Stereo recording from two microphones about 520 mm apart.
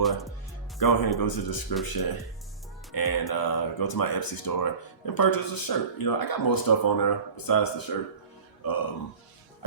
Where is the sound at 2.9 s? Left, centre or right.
Left.